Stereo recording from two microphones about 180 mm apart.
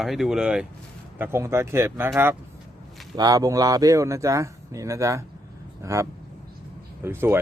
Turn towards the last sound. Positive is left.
turn(degrees=-15)  # may be behind; listen again after turning